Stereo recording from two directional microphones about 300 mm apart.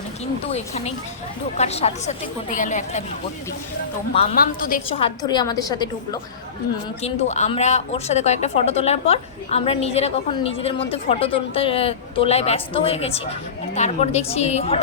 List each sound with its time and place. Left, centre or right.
0.5 s speech: left
4.1 s a woman's voice: left